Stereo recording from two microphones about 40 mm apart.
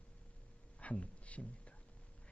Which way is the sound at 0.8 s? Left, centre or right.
Left.